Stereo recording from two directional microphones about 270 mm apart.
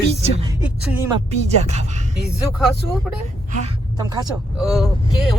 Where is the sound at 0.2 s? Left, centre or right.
Right.